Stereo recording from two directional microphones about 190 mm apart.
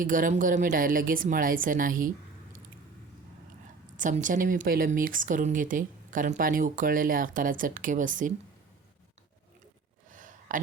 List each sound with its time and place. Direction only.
0.0 s speech: 45° right (ahead or behind)
3.9 s speech: 40° right (ahead or behind)
10.1 s a sound: 45° right (ahead or behind)